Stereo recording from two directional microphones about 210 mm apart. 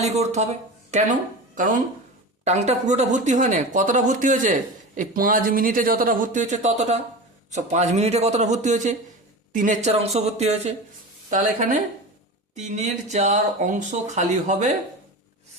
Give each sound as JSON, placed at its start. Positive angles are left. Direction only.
{"t": 0.0, "sound": "speech", "side_deg": -30}